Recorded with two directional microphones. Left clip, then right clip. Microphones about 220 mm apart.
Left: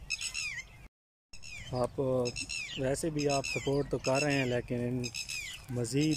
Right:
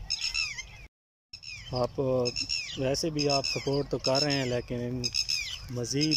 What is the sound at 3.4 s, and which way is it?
Speech, 15° left (ahead or behind).